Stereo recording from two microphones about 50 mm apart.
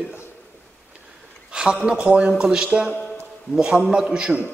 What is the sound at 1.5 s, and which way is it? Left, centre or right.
Speech, centre.